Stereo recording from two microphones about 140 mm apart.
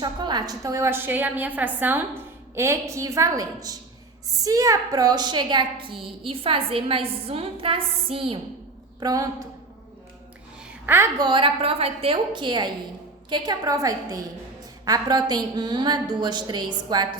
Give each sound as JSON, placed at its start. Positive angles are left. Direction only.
{"t": 0.0, "sound": "a woman's voice", "side_deg": -30}
{"t": 9.0, "sound": "a woman's voice", "side_deg": -25}
{"t": 10.8, "sound": "a woman's voice", "side_deg": -15}
{"t": 11.2, "sound": "a woman's voice", "side_deg": -35}